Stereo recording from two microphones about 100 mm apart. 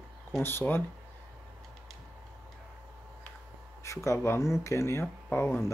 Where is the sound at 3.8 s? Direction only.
30° left (ahead or behind).